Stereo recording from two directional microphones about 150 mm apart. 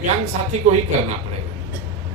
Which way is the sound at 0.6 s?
55° right (ahead or behind).